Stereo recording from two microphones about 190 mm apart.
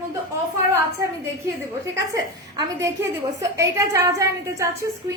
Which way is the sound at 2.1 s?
15° right (ahead or behind).